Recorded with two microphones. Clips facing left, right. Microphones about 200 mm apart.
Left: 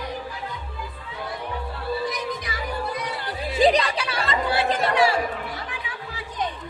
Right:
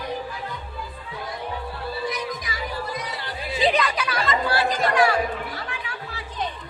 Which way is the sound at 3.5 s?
45° left (ahead or behind).